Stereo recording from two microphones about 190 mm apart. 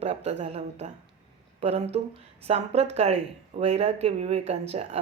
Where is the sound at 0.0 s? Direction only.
35° right (ahead or behind).